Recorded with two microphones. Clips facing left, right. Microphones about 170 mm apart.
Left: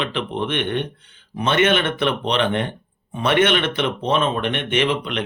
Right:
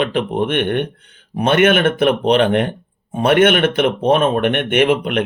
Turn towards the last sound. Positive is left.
turn(degrees=-50)  # may be behind; listen again after turning